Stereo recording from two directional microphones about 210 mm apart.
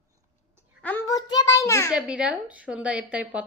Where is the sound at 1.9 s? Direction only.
5° right (ahead or behind).